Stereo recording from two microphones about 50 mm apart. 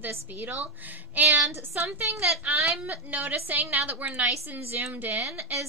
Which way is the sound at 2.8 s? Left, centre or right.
Right.